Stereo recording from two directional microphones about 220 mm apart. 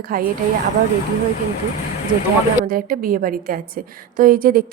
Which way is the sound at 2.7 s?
40° right (ahead or behind).